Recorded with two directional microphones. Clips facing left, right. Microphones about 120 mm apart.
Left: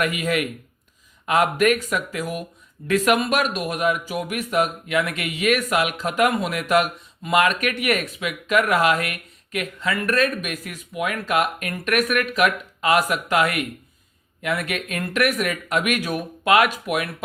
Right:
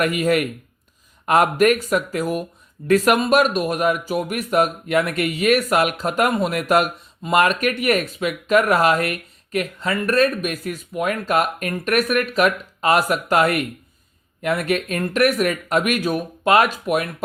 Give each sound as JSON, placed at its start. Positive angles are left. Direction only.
{"t": 0.0, "sound": "speech", "side_deg": -45}